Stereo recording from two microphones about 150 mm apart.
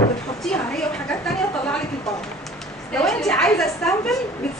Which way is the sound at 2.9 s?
5° left (ahead or behind).